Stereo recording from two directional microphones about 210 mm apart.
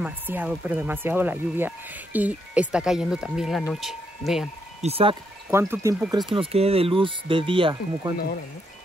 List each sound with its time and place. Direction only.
0.0 s speech: 5° right (ahead or behind)
4.8 s speech: 25° right (ahead or behind)
5.5 s speech: 15° right (ahead or behind)
6.1 s speech: 20° right (ahead or behind)